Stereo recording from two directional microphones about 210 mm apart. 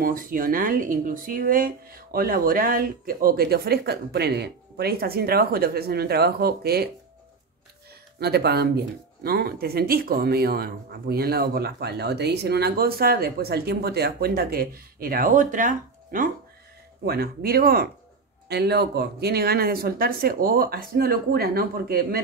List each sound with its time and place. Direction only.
0.0 s speech: 40° right (ahead or behind)
8.2 s speech: 50° right (ahead or behind)